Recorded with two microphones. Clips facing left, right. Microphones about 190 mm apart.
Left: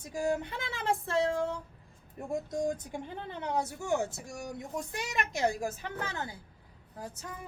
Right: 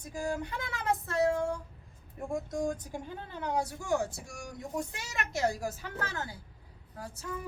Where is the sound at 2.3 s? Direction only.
25° left (ahead or behind).